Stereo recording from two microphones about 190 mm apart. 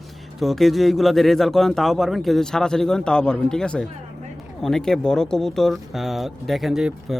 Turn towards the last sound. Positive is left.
turn(degrees=0)  # may be behind; listen again after turning